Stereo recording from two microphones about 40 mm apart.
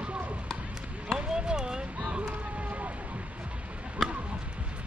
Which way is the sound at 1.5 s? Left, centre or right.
Centre.